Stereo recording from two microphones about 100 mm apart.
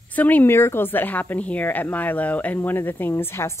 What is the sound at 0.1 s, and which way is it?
A woman's voice, 15° left (ahead or behind).